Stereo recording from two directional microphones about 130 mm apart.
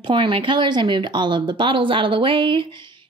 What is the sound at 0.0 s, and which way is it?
Speech, 40° right (ahead or behind).